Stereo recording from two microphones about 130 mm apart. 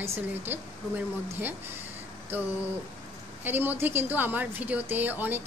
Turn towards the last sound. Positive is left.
turn(degrees=-15)  # may be behind; listen again after turning